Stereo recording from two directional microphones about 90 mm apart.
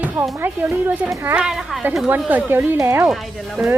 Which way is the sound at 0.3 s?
20° right (ahead or behind).